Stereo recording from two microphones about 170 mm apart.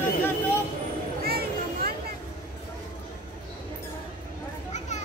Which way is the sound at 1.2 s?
65° right (ahead or behind).